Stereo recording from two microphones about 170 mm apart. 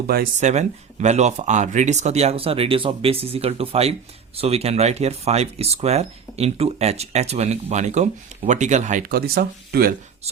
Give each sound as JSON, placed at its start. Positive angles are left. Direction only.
{"t": 0.3, "sound": "speech", "side_deg": -45}